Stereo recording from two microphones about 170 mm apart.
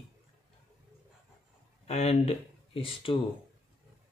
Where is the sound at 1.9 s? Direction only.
40° left (ahead or behind).